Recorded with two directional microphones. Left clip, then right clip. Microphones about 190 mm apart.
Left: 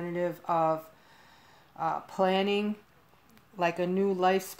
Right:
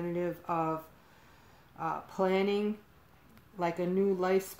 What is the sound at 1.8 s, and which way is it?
Speech, 40° left (ahead or behind).